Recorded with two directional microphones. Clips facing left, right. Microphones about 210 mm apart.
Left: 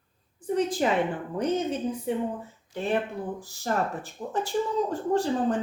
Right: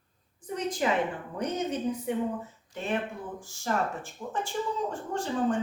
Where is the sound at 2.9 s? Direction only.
35° left (ahead or behind).